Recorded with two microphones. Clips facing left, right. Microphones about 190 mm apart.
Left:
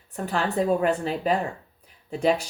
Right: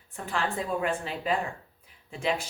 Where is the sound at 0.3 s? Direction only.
40° left (ahead or behind).